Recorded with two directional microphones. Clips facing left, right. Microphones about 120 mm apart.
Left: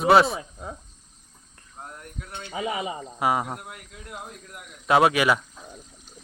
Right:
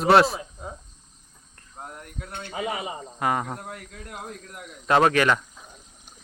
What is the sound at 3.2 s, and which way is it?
Speech, 10° left (ahead or behind).